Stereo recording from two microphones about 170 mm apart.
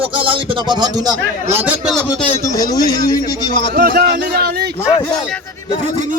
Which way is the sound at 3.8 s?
60° right (ahead or behind).